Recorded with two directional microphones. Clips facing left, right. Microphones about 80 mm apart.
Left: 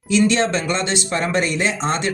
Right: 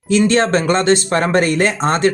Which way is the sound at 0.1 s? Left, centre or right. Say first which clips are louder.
Right 4 dB; right.